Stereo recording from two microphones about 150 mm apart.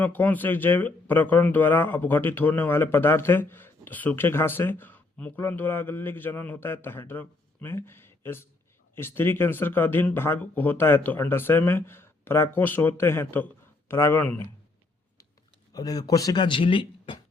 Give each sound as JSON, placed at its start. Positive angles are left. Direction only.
{"t": 0.0, "sound": "speech", "side_deg": 10}
{"t": 15.7, "sound": "speech", "side_deg": 25}